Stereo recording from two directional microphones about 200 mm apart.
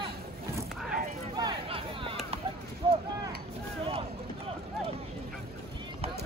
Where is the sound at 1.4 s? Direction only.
25° right (ahead or behind).